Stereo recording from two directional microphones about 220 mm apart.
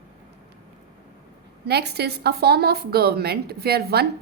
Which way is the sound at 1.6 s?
50° right (ahead or behind).